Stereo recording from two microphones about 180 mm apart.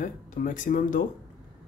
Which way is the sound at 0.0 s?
45° left (ahead or behind).